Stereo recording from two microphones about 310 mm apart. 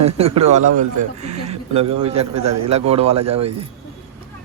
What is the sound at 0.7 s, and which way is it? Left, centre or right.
Speech, right.